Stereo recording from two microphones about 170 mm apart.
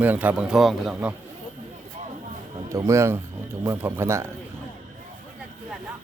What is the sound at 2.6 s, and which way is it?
Speech, 20° right (ahead or behind).